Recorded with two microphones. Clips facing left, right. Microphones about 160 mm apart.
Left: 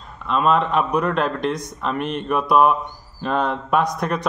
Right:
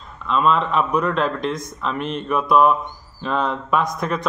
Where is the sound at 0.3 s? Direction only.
55° left (ahead or behind).